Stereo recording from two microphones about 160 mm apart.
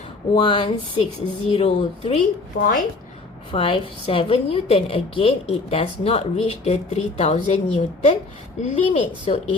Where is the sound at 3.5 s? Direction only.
35° left (ahead or behind).